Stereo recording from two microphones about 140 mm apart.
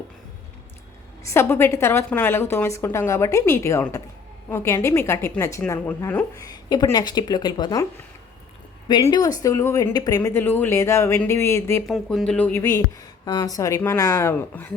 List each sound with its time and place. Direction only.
1.2 s a woman's voice: 20° left (ahead or behind)
6.3 s speech: 25° left (ahead or behind)
8.9 s speech: 30° left (ahead or behind)
11.9 s speech: centre (ahead or behind)